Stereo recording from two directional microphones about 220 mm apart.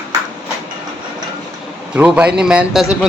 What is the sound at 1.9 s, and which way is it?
A man's voice, 5° right (ahead or behind).